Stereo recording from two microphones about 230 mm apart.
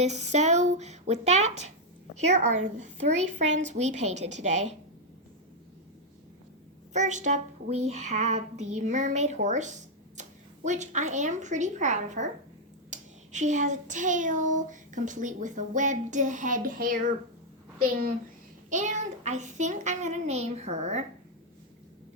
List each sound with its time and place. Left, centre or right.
0.0 s speech: right
2.1 s child singing: right
6.9 s child singing: right
10.2 s speech: right
12.9 s child singing: right
18.7 s child singing: right